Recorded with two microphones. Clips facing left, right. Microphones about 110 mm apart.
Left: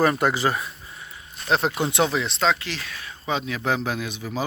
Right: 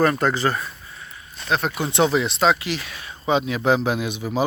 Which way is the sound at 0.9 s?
25° left (ahead or behind).